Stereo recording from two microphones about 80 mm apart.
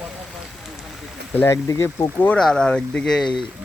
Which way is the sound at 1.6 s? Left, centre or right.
Left.